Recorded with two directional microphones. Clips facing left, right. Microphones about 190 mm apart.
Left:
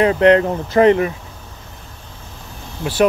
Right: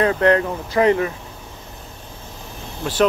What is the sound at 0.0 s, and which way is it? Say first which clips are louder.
Speech: left 4 dB; 20° left (ahead or behind).